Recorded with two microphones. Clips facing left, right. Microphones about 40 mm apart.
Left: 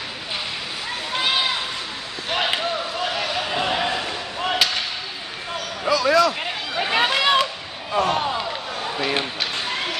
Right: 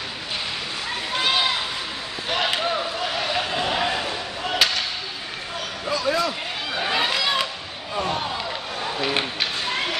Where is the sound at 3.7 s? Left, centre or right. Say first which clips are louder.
Right 1 dB; centre.